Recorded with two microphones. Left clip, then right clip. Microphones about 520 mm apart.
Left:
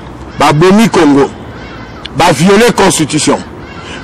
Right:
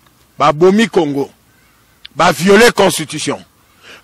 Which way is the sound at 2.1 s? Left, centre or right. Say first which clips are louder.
Left 2 dB; right.